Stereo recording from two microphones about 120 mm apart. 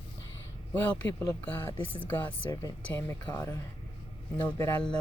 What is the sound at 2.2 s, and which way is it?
Speech, 35° left (ahead or behind).